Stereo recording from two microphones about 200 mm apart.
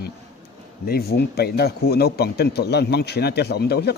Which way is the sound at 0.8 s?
50° left (ahead or behind).